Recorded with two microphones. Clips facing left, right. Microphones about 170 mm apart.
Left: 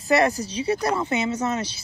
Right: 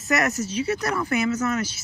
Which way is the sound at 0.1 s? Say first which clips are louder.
Left 3 dB; 30° left (ahead or behind).